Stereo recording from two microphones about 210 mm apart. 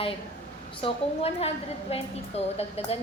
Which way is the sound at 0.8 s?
30° left (ahead or behind).